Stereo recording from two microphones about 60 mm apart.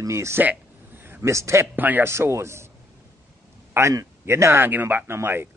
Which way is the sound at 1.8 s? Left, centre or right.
Right.